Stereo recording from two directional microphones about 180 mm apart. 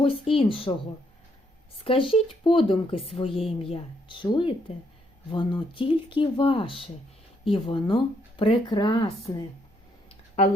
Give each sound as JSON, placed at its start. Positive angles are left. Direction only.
{"t": 0.0, "sound": "speech", "side_deg": 30}
{"t": 1.8, "sound": "speech", "side_deg": 30}